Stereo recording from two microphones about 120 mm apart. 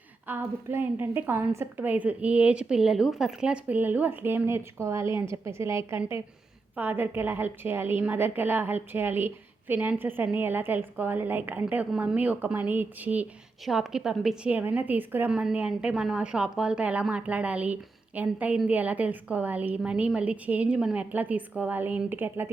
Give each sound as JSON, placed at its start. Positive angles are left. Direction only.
{"t": 0.3, "sound": "a woman's voice", "side_deg": -20}